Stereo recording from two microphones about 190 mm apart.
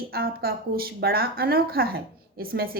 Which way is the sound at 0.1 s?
55° right (ahead or behind).